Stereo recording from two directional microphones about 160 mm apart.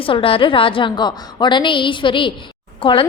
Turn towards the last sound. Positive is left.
turn(degrees=30)  # may be behind; listen again after turning